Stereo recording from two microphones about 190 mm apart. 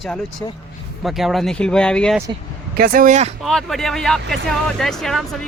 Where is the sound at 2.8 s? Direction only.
45° right (ahead or behind).